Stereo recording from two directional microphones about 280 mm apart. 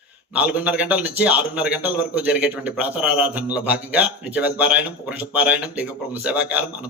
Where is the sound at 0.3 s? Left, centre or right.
Centre.